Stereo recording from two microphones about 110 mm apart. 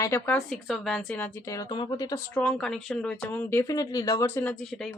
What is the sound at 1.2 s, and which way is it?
Speech, 20° left (ahead or behind).